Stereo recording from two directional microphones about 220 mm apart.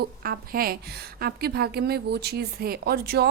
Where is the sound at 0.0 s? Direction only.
40° right (ahead or behind).